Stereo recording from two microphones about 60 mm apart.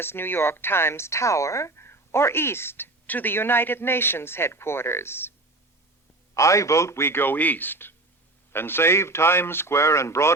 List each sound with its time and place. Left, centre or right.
0.0 s speech: left
6.3 s a man's voice: left